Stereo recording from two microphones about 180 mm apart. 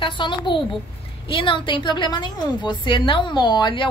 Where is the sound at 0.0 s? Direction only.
25° left (ahead or behind).